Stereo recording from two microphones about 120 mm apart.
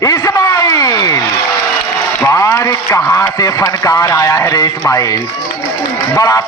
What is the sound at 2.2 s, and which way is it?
A man's voice, 30° left (ahead or behind).